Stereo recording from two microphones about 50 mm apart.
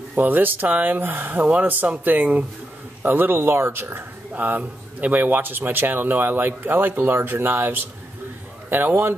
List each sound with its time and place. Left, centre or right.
0.2 s speech: right
1.5 s a man's voice: right
4.4 s a man's voice: right